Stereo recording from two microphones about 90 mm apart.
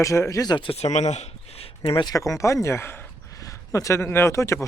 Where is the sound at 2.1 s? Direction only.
40° left (ahead or behind).